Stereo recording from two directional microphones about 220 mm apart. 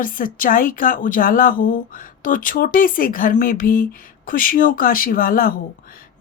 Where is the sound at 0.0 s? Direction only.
40° left (ahead or behind).